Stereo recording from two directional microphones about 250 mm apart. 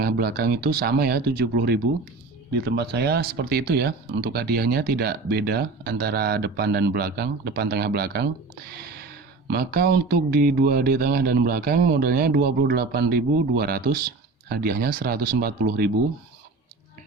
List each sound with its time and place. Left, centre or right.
0.0 s speech: right
9.5 s speech: right